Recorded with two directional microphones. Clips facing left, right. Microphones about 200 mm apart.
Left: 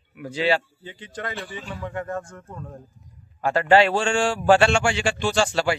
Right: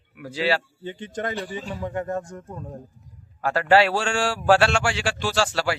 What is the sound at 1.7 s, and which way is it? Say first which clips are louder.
Speech: right 2 dB; 20° right (ahead or behind).